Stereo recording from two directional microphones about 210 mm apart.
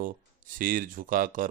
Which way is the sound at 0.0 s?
40° right (ahead or behind).